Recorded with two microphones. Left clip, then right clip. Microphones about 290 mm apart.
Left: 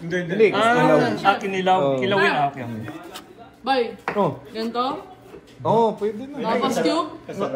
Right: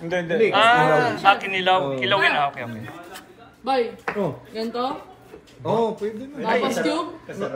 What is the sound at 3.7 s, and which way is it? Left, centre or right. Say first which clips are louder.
Speech: left 1 dB; centre.